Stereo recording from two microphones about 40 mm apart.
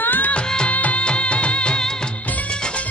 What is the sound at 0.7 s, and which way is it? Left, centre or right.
Music, left.